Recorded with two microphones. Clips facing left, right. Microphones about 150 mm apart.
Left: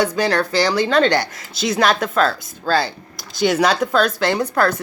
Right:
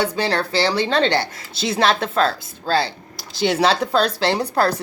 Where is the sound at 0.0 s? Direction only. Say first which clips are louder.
Left 3 dB; 30° right (ahead or behind).